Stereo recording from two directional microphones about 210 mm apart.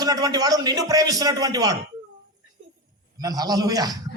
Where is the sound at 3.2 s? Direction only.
20° right (ahead or behind).